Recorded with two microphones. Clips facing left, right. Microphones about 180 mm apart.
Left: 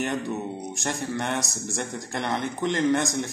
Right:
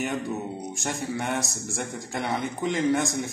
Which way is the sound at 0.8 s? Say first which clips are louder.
Left 1 dB; 5° right (ahead or behind).